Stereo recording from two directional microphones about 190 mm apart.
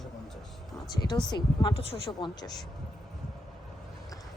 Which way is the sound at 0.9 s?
20° left (ahead or behind).